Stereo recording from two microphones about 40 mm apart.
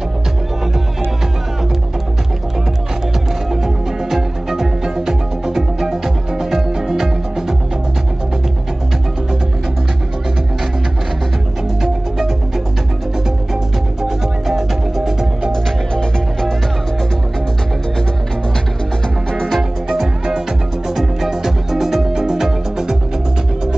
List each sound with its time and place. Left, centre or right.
3.6 s music: centre
11.8 s music: centre
14.0 s music: centre
15.5 s music: centre
19.3 s music: centre
19.9 s music: centre